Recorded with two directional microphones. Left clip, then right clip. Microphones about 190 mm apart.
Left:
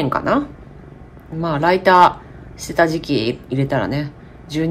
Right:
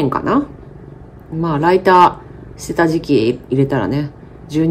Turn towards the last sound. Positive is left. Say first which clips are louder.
# right 5 dB
turn(degrees=-10)  # may be behind; listen again after turning